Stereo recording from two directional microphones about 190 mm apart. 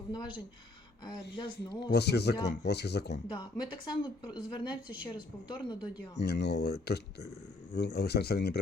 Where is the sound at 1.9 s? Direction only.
60° left (ahead or behind).